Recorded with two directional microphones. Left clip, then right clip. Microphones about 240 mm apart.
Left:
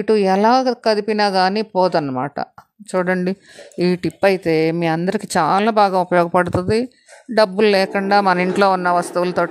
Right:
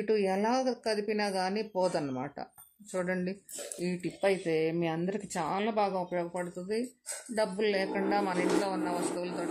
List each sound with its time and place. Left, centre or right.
0.0 s speech: left